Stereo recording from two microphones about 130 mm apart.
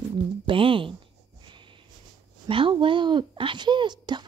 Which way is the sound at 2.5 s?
40° right (ahead or behind).